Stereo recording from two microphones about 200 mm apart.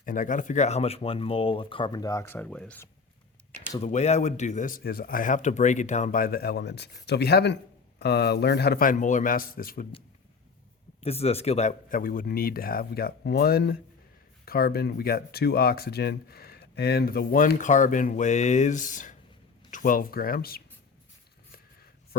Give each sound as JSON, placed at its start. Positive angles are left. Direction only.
{"t": 0.0, "sound": "speech", "side_deg": 40}
{"t": 3.8, "sound": "speech", "side_deg": 35}
{"t": 11.0, "sound": "speech", "side_deg": 30}